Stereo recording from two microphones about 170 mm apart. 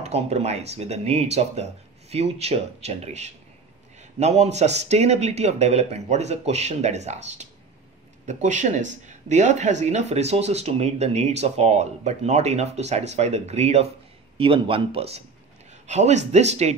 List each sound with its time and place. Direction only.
0.0 s speech: 40° right (ahead or behind)